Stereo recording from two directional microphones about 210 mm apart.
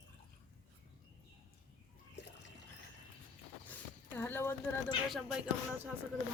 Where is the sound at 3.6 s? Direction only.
10° left (ahead or behind).